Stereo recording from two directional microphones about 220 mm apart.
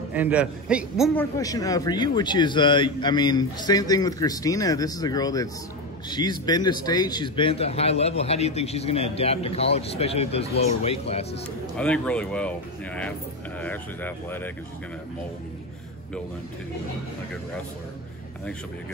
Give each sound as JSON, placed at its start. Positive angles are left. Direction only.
{"t": 0.1, "sound": "speech", "side_deg": -5}
{"t": 1.1, "sound": "a man's voice", "side_deg": 15}
{"t": 11.7, "sound": "a man's voice", "side_deg": 5}